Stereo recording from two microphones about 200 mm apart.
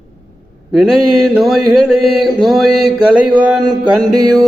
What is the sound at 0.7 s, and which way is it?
Mantra, centre (ahead or behind).